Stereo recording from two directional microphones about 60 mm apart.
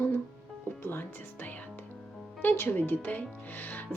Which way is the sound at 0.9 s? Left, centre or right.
Left.